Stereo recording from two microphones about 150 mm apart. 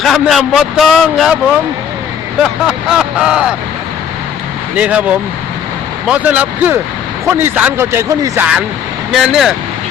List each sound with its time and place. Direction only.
0.0 s a man's voice: centre (ahead or behind)
2.4 s a man's voice: 5° right (ahead or behind)
4.8 s speech: 10° right (ahead or behind)
8.4 s a man's voice: 5° right (ahead or behind)